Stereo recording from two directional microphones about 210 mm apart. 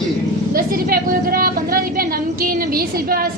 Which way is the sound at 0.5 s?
45° right (ahead or behind).